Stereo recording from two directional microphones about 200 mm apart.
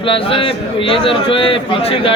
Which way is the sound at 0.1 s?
25° left (ahead or behind).